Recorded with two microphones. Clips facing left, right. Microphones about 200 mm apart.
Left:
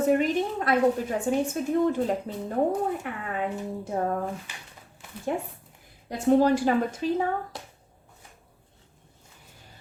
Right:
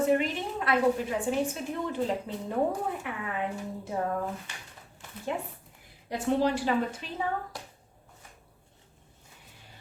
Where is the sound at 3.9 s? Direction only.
45° left (ahead or behind).